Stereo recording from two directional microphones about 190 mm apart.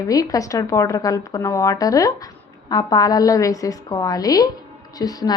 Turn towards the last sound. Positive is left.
turn(degrees=20)  # may be behind; listen again after turning